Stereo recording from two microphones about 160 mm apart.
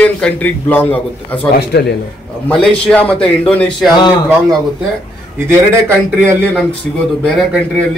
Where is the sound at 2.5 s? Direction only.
5° left (ahead or behind).